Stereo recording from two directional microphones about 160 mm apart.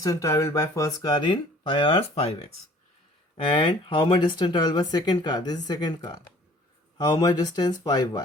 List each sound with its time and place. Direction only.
0.0 s speech: 20° left (ahead or behind)